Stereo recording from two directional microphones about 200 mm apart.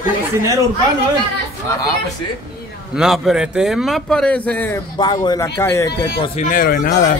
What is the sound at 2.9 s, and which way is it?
A man's voice, centre (ahead or behind).